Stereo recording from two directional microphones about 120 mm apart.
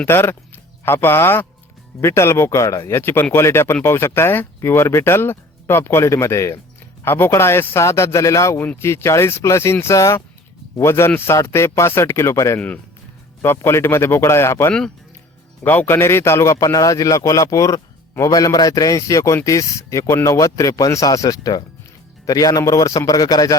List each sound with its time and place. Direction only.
0.0 s a man's voice: 20° left (ahead or behind)
12.5 s a man's voice: 10° left (ahead or behind)
14.7 s a man's voice: 5° left (ahead or behind); by 23.6 s 30° left (ahead or behind)